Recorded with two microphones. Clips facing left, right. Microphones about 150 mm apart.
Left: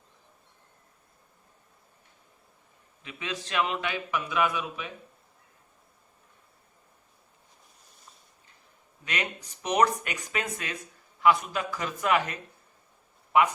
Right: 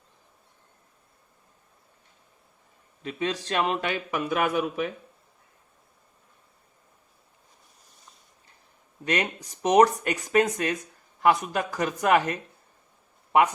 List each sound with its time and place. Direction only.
3.0 s a man's voice: 40° right (ahead or behind)
9.0 s a man's voice: 40° right (ahead or behind)